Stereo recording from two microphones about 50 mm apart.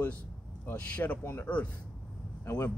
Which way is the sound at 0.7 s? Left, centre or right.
Left.